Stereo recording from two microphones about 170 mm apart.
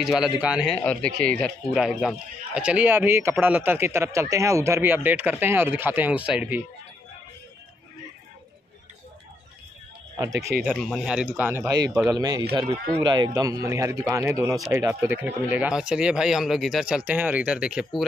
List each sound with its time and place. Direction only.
0.0 s speech: centre (ahead or behind)
0.8 s speech: 5° left (ahead or behind)
10.1 s speech: 20° right (ahead or behind)
10.6 s a man's voice: centre (ahead or behind)